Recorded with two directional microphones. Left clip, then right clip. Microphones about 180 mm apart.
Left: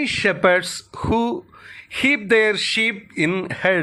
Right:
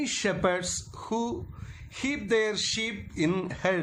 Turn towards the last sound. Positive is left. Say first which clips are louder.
# left 9 dB
turn(degrees=30)  # may be behind; listen again after turning